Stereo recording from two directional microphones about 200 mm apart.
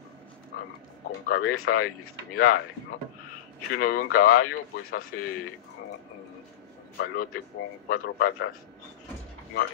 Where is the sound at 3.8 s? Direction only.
45° left (ahead or behind).